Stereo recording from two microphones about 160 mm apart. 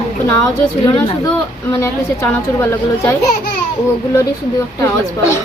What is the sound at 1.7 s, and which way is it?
A man's voice, 15° left (ahead or behind).